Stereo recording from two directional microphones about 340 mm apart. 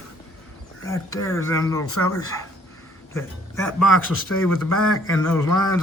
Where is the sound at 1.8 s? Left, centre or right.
Left.